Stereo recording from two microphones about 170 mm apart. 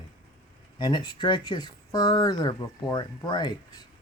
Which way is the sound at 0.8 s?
25° left (ahead or behind).